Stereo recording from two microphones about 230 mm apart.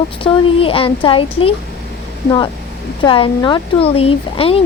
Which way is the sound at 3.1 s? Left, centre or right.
Left.